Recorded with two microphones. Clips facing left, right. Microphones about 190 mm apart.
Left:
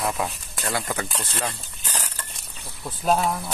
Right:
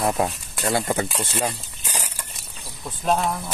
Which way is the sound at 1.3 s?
10° right (ahead or behind).